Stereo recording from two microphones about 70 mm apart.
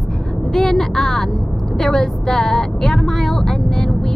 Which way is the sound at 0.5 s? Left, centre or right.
Centre.